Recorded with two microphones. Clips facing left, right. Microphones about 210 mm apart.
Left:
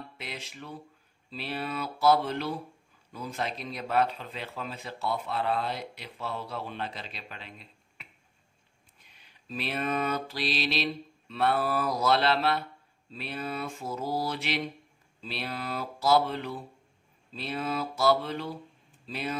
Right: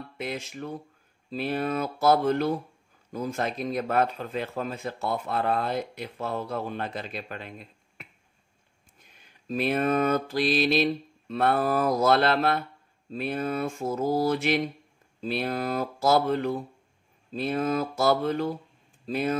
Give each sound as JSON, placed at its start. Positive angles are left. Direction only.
{"t": 0.2, "sound": "speech", "side_deg": -50}
{"t": 9.0, "sound": "mantra", "side_deg": -45}
{"t": 13.1, "sound": "speech", "side_deg": -50}